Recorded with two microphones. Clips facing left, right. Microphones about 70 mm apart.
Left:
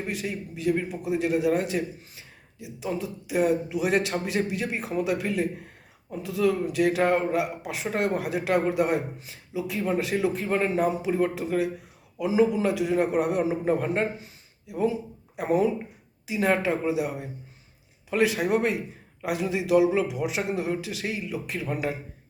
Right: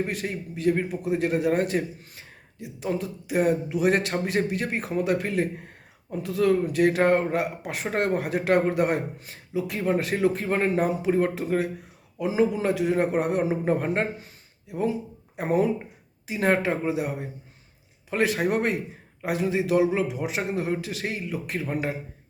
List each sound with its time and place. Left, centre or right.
0.0 s a man's voice: right